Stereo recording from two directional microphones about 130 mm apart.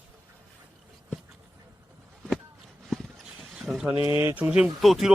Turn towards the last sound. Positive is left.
turn(degrees=0)  # may be behind; listen again after turning